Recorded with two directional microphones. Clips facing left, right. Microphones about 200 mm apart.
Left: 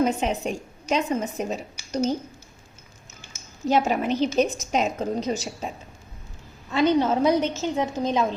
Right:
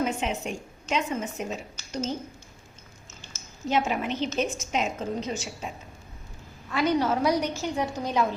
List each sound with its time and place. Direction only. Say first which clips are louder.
0.0 s a woman's voice: left 5 dB; 35° left (ahead or behind)
1.8 s a sound: left 1 dB; 10° left (ahead or behind)
3.7 s a woman's voice: left 4 dB; 40° left (ahead or behind)
6.7 s a woman's voice: left 4 dB; 25° left (ahead or behind)